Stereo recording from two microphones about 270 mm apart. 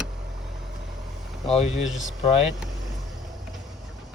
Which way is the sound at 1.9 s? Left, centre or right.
Centre.